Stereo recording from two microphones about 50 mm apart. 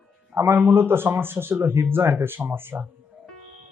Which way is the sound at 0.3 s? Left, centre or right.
Right.